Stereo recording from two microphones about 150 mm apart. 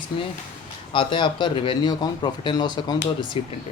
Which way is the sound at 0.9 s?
35° left (ahead or behind).